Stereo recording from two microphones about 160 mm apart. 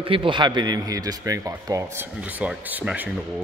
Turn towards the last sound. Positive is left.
turn(degrees=-10)  # may be behind; listen again after turning